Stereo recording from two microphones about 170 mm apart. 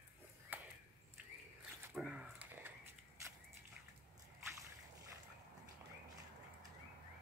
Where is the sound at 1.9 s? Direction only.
5° right (ahead or behind).